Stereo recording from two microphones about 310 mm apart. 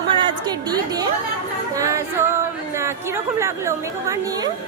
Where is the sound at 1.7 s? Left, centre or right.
Centre.